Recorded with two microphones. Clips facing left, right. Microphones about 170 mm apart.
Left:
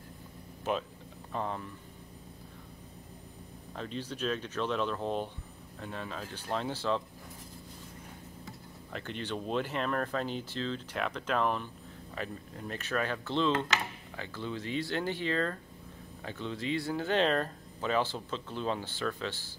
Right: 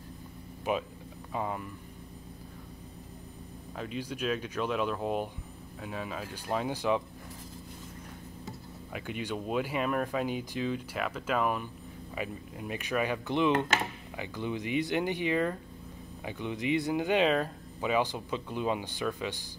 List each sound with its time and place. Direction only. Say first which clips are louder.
0.7 s speech: right 2 dB; 10° right (ahead or behind)
3.7 s speech: right 2 dB; 5° right (ahead or behind)
8.9 s speech: right 2 dB; 10° right (ahead or behind)